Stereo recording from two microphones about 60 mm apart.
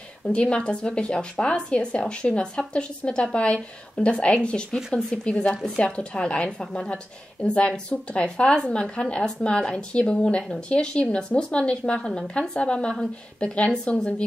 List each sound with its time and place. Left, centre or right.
0.3 s a woman's voice: centre